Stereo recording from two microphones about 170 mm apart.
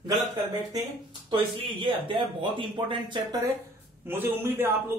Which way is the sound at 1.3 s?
30° right (ahead or behind).